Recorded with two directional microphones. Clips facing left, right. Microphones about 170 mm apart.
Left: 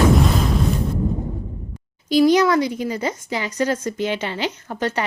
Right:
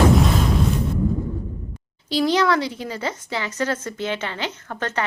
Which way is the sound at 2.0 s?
15° left (ahead or behind).